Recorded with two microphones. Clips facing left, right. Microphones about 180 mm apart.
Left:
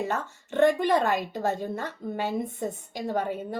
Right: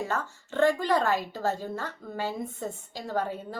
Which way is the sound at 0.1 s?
20° left (ahead or behind).